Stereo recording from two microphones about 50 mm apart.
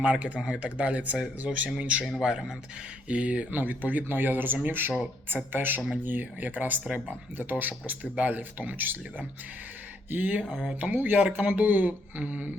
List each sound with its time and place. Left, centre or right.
0.0 s speech: right
1.5 s speech: centre
1.8 s speech: right
10.4 s speech: centre
10.8 s speech: right